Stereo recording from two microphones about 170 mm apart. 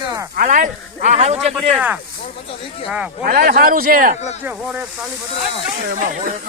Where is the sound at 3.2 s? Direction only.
60° right (ahead or behind).